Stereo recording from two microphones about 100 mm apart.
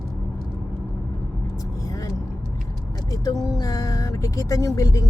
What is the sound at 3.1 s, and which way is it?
Speech, 40° left (ahead or behind).